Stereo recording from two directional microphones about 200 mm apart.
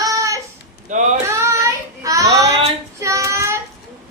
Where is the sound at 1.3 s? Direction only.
15° right (ahead or behind).